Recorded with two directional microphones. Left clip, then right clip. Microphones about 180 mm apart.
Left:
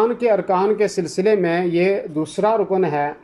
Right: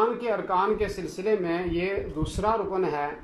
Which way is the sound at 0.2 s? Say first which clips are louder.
Left 8 dB; 25° left (ahead or behind).